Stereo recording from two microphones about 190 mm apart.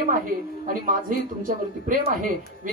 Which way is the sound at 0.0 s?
45° right (ahead or behind).